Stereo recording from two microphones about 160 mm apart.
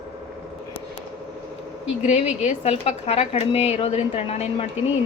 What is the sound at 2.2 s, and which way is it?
Speech, 45° left (ahead or behind).